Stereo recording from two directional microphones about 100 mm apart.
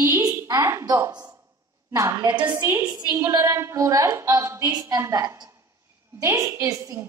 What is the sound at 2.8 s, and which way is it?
Speech, 45° right (ahead or behind).